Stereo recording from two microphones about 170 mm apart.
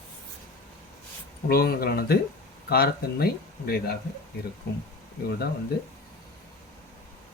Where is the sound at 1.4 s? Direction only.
65° left (ahead or behind).